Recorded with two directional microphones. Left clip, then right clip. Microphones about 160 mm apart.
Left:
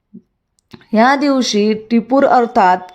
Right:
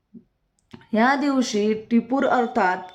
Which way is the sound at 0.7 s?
35° left (ahead or behind).